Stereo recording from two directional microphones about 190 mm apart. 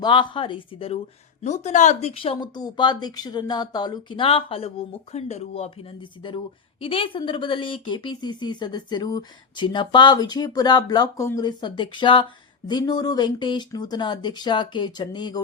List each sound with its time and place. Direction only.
0.0 s speech: 25° left (ahead or behind)